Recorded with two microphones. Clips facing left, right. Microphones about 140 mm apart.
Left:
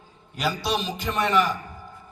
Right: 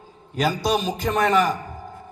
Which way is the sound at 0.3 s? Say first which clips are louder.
Right 4 dB; 45° right (ahead or behind).